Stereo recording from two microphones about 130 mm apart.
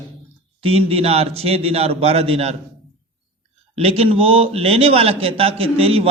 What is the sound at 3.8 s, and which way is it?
A man's voice, 50° right (ahead or behind).